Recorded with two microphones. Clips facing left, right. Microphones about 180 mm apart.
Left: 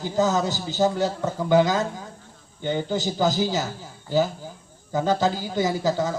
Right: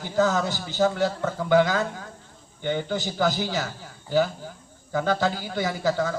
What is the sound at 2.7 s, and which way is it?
Speech, 15° left (ahead or behind).